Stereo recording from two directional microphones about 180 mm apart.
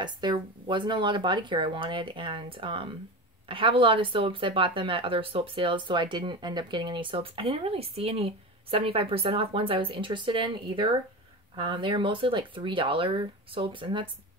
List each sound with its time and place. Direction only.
0.0 s speech: 25° right (ahead or behind)